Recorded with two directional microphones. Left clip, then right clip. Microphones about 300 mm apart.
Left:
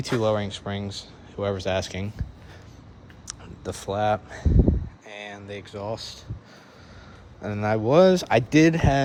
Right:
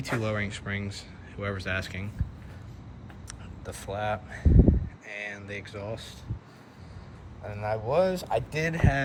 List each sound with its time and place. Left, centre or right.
0.1 s speech: centre
3.2 s speech: centre
4.4 s speech: right
5.0 s speech: centre
7.5 s speech: left